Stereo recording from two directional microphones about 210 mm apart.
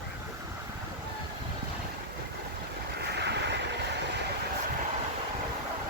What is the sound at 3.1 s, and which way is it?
Boat, 55° right (ahead or behind).